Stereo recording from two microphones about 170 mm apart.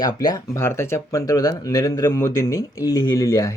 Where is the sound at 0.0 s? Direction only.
25° left (ahead or behind).